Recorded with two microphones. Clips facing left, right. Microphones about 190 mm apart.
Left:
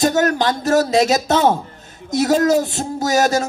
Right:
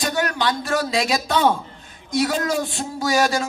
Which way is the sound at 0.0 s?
45° left (ahead or behind).